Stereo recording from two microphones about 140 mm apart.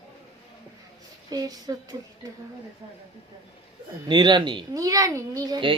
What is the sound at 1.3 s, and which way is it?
Speech, 25° right (ahead or behind).